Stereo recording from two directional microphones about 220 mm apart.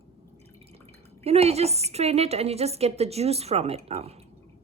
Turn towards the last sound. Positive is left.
turn(degrees=-30)  # may be behind; listen again after turning